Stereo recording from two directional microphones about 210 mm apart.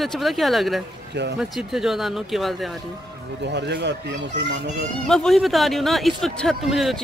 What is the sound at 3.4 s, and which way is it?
Speech, 55° right (ahead or behind).